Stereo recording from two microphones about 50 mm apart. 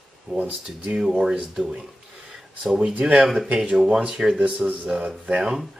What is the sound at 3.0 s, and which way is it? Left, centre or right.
Speech, right.